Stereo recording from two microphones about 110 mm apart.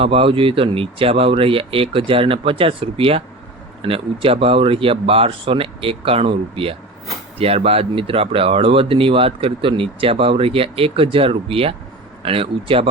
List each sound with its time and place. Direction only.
0.0 s speech: 55° right (ahead or behind)